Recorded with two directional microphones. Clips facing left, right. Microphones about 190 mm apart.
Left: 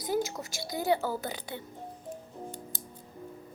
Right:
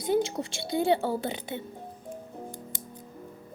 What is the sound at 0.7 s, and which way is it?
Speech, 30° right (ahead or behind).